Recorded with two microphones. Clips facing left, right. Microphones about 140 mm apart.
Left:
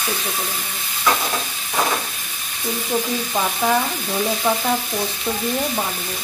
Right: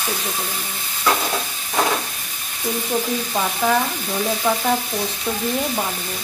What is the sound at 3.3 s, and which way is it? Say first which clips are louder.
Frying: even; 5° left (ahead or behind).